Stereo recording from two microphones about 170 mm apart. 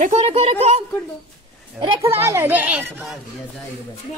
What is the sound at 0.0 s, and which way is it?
Speech, 40° right (ahead or behind).